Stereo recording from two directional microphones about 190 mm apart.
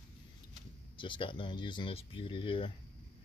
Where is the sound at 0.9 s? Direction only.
25° left (ahead or behind).